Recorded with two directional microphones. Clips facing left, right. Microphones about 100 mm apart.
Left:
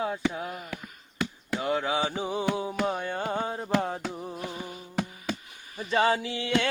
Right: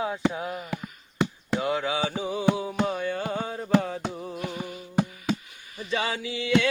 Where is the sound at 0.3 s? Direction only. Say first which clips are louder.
Right 3 dB; 45° right (ahead or behind).